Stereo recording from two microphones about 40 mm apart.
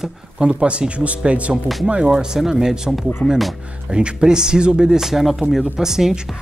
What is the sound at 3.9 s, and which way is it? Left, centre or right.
Speech, right.